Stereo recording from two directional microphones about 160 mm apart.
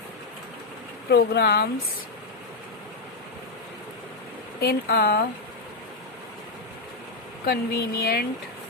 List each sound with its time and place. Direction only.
1.1 s speech: 85° left
4.6 s speech: 75° left (ahead or behind)
7.4 s speech: 80° left